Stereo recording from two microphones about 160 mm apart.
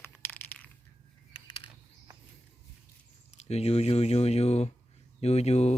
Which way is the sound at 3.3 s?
40° left (ahead or behind).